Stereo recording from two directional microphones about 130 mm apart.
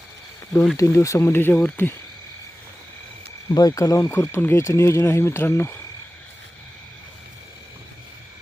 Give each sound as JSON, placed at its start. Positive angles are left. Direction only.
{"t": 0.8, "sound": "speech", "side_deg": 25}
{"t": 3.5, "sound": "speech", "side_deg": 25}